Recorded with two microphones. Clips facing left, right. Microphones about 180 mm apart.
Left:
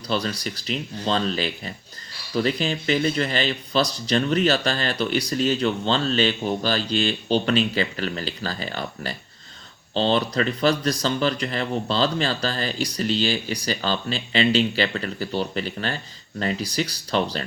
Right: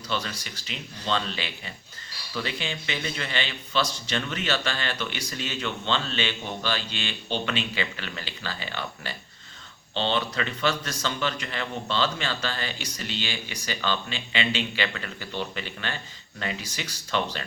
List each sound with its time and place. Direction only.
0.1 s speech: 35° left (ahead or behind)